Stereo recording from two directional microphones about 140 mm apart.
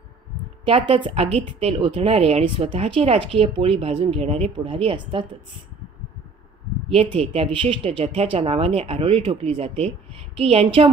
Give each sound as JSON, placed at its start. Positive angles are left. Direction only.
{"t": 0.7, "sound": "speech", "side_deg": -35}
{"t": 7.0, "sound": "speech", "side_deg": -40}